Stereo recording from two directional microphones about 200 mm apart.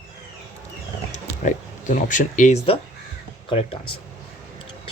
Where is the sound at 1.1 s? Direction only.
40° left (ahead or behind).